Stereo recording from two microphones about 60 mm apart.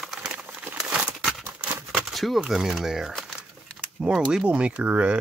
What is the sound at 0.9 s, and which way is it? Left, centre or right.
Crumpling, centre.